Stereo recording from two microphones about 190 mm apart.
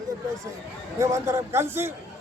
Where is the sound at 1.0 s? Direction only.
15° right (ahead or behind).